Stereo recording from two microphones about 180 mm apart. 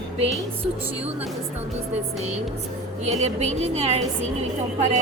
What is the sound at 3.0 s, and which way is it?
Speech, 40° right (ahead or behind).